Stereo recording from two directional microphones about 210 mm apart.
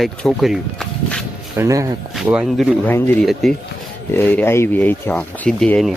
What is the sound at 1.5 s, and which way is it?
Speech, 15° right (ahead or behind).